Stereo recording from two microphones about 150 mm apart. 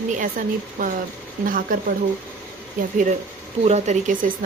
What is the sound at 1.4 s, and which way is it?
Speech, 70° right (ahead or behind).